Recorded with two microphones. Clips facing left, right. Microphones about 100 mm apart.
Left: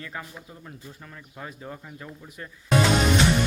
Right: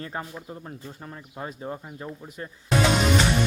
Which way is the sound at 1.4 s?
25° right (ahead or behind).